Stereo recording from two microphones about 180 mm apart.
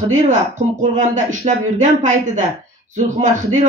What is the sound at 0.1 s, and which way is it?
A woman's voice, 45° right (ahead or behind).